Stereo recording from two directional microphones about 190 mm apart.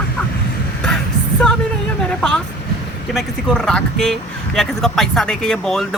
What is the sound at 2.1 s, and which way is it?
Speech, 5° left (ahead or behind).